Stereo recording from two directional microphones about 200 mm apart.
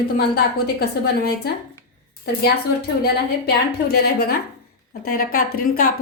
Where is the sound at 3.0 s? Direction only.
55° left (ahead or behind).